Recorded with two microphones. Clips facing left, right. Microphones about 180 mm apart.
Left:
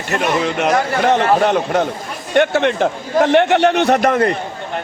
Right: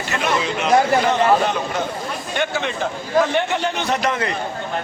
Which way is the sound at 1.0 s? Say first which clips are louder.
Left 3 dB; 65° left (ahead or behind).